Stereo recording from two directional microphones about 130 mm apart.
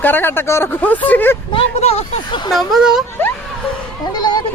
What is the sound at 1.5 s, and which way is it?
Speech, 55° left (ahead or behind).